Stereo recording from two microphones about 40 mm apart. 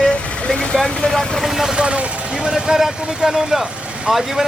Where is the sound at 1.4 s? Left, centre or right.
Centre.